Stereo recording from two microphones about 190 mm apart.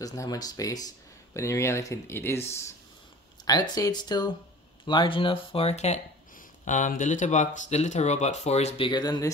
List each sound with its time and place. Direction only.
0.0 s speech: 20° left (ahead or behind)